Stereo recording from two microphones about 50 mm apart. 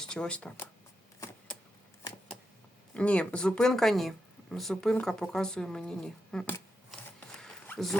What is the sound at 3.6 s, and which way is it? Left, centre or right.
Speech, centre.